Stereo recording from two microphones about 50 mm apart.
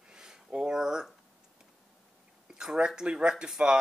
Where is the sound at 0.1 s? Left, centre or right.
Centre.